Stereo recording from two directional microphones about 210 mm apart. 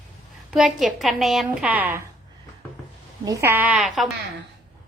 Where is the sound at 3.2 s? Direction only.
15° right (ahead or behind).